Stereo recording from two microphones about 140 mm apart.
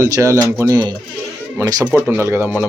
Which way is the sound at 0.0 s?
20° right (ahead or behind).